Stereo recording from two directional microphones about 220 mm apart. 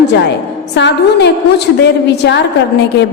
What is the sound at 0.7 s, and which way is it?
Speech, 50° left (ahead or behind).